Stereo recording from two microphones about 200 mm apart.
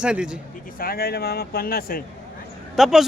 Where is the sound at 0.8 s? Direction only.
50° left (ahead or behind).